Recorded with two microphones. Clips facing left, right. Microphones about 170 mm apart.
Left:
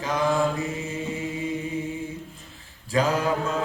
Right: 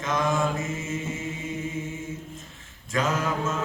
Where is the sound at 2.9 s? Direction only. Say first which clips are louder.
Left 3 dB; 35° left (ahead or behind).